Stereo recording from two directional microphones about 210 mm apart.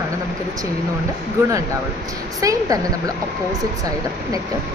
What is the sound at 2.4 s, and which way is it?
Speech, 15° right (ahead or behind).